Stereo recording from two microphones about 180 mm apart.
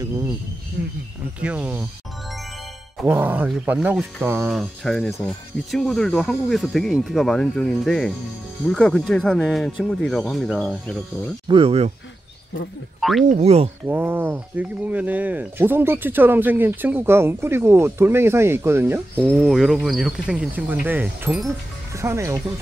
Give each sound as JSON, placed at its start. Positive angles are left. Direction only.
{"t": 1.4, "sound": "speech", "side_deg": -5}
{"t": 3.1, "sound": "speech", "side_deg": -10}
{"t": 11.4, "sound": "speech", "side_deg": -30}
{"t": 13.3, "sound": "speech", "side_deg": -35}
{"t": 13.8, "sound": "speech", "side_deg": -10}